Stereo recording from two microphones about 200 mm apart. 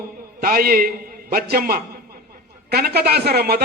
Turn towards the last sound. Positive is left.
turn(degrees=-50)  # may be behind; listen again after turning